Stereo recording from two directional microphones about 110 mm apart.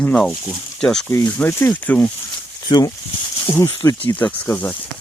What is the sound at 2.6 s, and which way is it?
Speech, 40° left (ahead or behind).